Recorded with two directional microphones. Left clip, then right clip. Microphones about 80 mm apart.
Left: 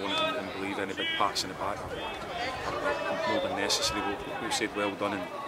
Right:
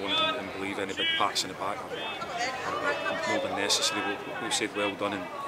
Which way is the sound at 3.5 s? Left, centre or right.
Centre.